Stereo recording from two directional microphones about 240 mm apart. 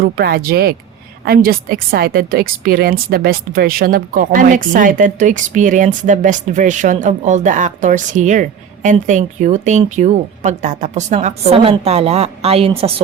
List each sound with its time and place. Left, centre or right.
0.0 s a woman's voice: right